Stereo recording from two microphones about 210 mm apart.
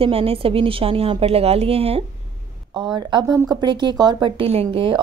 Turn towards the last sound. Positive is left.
turn(degrees=-25)  # may be behind; listen again after turning